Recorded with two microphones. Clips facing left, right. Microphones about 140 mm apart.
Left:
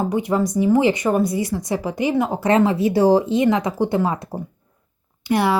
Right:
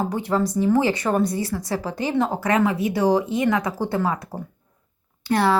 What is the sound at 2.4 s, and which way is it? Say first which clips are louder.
Speech: left 4 dB; 25° left (ahead or behind).